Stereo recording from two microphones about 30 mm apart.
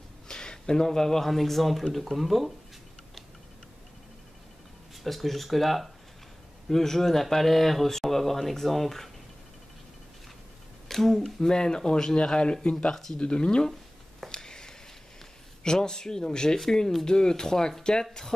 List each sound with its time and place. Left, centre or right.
0.3 s a sound: left
0.8 s speech: centre
1.3 s speech: centre
5.0 s speech: centre
6.7 s speech: centre
10.9 s speech: centre
11.4 s speech: left
13.2 s speech: left
14.3 s a sound: left
15.6 s speech: left